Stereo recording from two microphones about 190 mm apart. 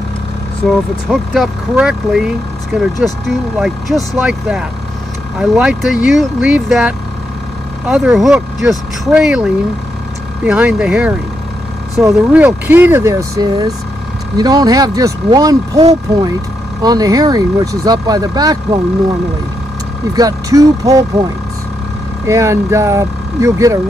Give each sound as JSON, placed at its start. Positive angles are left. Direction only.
{"t": 1.1, "sound": "speech", "side_deg": 0}
{"t": 16.8, "sound": "speech", "side_deg": -20}
{"t": 20.2, "sound": "speech", "side_deg": -20}
{"t": 22.2, "sound": "speech", "side_deg": -15}